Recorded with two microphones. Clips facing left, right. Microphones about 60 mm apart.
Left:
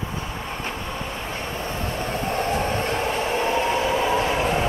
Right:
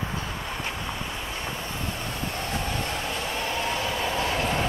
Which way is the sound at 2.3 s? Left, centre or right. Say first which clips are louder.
Left 7 dB; left.